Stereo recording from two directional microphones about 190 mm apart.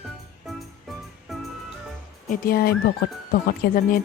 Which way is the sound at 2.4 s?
50° left (ahead or behind).